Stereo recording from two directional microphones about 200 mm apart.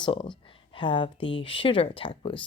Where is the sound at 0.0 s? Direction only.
25° left (ahead or behind).